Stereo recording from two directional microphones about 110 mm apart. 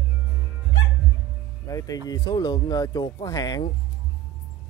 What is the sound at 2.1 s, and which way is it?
Speech, 35° left (ahead or behind).